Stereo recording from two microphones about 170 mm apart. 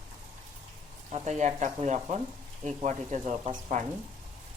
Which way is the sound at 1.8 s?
40° right (ahead or behind).